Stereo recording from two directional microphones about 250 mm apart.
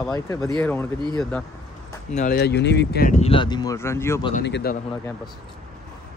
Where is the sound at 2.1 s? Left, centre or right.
Left.